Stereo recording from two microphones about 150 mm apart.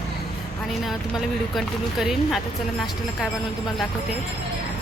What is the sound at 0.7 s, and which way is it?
Speech, centre (ahead or behind).